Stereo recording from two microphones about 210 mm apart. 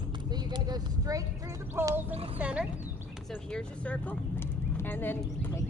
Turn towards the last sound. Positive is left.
turn(degrees=10)  # may be behind; listen again after turning